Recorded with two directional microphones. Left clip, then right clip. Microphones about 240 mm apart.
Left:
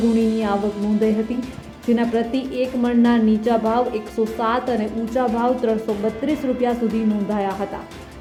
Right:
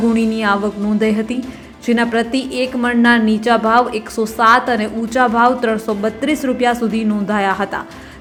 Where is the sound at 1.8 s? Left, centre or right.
Centre.